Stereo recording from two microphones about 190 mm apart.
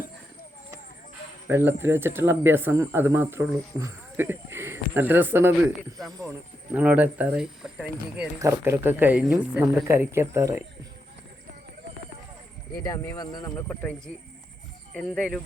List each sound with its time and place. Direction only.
1.5 s speech: 10° right (ahead or behind)
6.7 s speech: 10° right (ahead or behind)
8.4 s speech: 15° right (ahead or behind)
12.8 s speech: 20° left (ahead or behind)
14.9 s speech: centre (ahead or behind)